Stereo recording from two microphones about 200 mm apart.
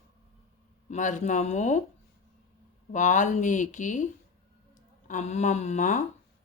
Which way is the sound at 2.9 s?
40° left (ahead or behind).